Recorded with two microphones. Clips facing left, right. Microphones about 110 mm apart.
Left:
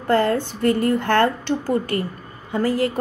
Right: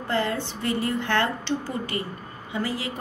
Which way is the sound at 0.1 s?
45° left (ahead or behind).